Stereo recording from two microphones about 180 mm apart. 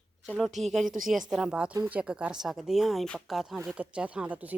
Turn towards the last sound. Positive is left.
turn(degrees=-10)  # may be behind; listen again after turning